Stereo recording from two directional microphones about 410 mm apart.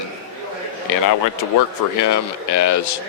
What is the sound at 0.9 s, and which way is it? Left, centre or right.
Speech, left.